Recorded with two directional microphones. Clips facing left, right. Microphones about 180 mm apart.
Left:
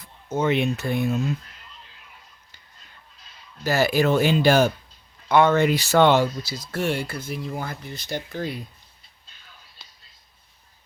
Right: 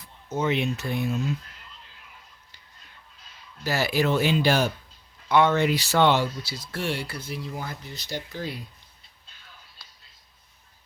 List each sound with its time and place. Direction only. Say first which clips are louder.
0.3 s speech: left 3 dB; 50° left (ahead or behind)
3.6 s speech: left 4 dB; 45° left (ahead or behind)